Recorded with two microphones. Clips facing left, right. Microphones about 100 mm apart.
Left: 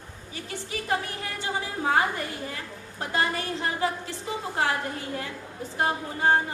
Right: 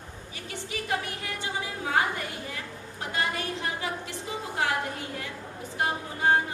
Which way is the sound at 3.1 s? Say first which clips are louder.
Left 3 dB; 35° left (ahead or behind).